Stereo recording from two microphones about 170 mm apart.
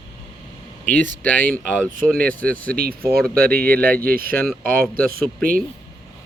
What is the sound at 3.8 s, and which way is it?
Speech, 10° left (ahead or behind).